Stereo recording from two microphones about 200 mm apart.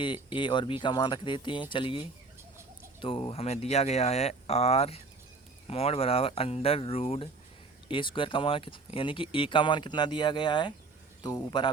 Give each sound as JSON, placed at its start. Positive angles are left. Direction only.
{"t": 0.0, "sound": "speech", "side_deg": 25}